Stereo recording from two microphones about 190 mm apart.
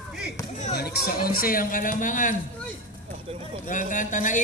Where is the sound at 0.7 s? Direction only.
60° left (ahead or behind).